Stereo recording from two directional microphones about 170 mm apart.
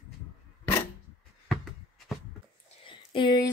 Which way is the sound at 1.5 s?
Centre (ahead or behind).